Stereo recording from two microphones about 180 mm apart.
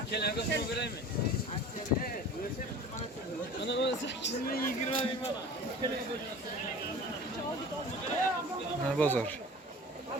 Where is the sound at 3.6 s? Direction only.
80° left.